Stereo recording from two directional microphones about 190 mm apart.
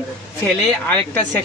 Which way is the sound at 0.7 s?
5° left (ahead or behind).